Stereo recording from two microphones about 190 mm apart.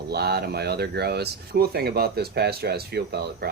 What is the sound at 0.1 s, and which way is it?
Speech, 60° right (ahead or behind).